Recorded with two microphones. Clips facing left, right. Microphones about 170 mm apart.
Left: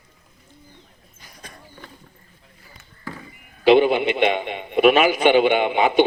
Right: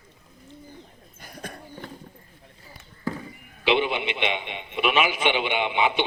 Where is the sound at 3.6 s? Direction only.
40° left (ahead or behind).